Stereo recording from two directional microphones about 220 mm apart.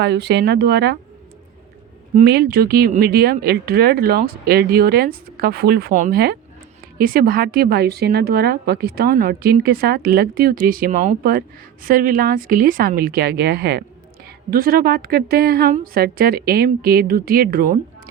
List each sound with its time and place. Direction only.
0.0 s speech: 50° right (ahead or behind)
2.1 s speech: 45° right (ahead or behind)